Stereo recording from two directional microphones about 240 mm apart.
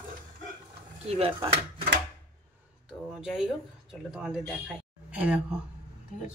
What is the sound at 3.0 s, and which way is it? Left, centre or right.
A woman's voice, centre.